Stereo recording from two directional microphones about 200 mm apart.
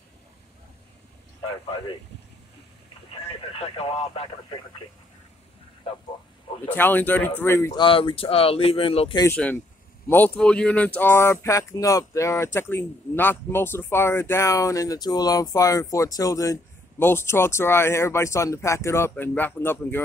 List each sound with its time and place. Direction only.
3.1 s speech: 30° left (ahead or behind)
6.7 s speech: 10° left (ahead or behind); by 9.2 s 30° left (ahead or behind)
9.2 s speech: 10° left (ahead or behind)